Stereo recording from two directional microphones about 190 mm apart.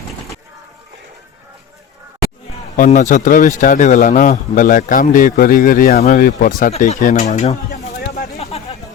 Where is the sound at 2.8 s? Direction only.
40° left (ahead or behind).